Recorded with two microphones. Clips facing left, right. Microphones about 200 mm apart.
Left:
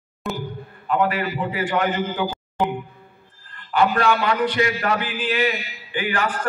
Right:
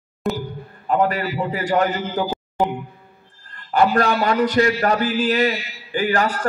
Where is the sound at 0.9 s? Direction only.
40° right (ahead or behind).